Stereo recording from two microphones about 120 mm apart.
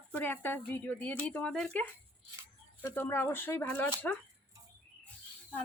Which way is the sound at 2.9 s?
15° left (ahead or behind).